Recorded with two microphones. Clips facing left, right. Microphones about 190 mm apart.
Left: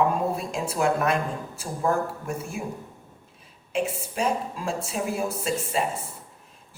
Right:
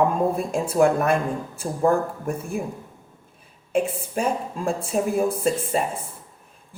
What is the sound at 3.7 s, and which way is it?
A woman's voice, 55° right (ahead or behind).